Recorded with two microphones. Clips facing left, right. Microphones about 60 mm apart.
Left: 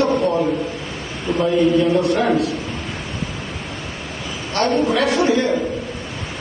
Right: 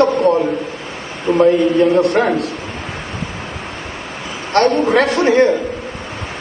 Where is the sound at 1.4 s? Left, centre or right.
Right.